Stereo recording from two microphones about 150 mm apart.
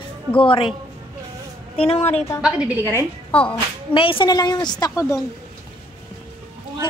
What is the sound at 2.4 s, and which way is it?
Speech, 5° right (ahead or behind).